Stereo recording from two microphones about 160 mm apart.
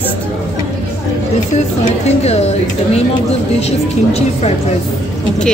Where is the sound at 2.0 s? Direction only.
40° left (ahead or behind).